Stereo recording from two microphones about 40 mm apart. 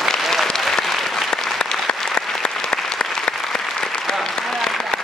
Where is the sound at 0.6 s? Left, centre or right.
Centre.